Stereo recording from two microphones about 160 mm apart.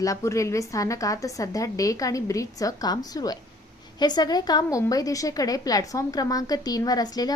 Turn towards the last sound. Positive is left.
turn(degrees=25)  # may be behind; listen again after turning